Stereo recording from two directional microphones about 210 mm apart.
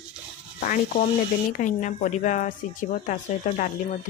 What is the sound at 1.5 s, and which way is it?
Speech, 35° left (ahead or behind).